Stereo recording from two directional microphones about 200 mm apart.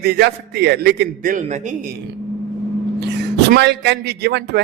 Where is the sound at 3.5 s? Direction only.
60° right (ahead or behind).